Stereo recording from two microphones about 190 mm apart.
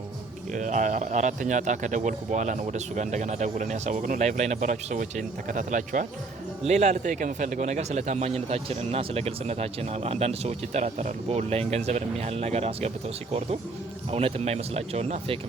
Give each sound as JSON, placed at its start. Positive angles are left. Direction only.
{"t": 0.5, "sound": "a man's voice", "side_deg": -40}
{"t": 14.1, "sound": "a man's voice", "side_deg": -30}